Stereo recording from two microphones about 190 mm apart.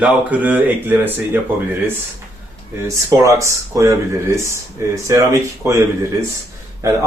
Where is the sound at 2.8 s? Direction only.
15° right (ahead or behind).